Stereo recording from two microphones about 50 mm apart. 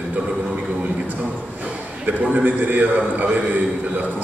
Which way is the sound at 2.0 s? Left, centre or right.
Right.